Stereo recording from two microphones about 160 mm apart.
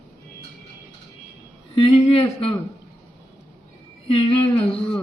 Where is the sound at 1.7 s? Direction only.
35° left (ahead or behind).